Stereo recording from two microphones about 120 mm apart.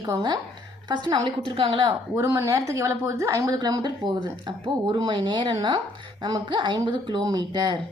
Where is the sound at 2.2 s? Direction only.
25° right (ahead or behind).